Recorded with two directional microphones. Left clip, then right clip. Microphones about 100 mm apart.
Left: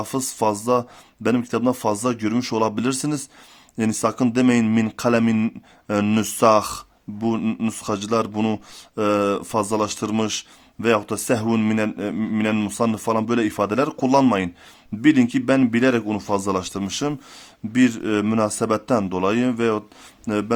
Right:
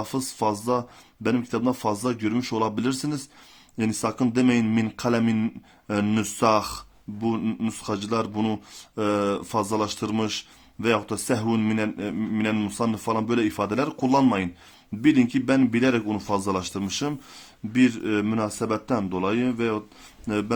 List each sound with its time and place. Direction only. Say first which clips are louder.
0.0 s speech: left 4 dB; 40° left (ahead or behind)
20.2 s speech: left 3 dB; 40° left (ahead or behind)